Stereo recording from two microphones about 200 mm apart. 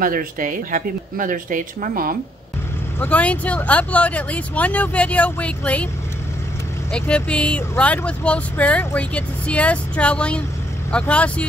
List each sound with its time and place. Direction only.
0.0 s speech: 45° right (ahead or behind)
3.0 s speech: 5° left (ahead or behind)
6.9 s speech: 5° left (ahead or behind)